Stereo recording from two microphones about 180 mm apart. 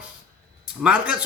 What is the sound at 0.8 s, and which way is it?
Speech, 5° right (ahead or behind).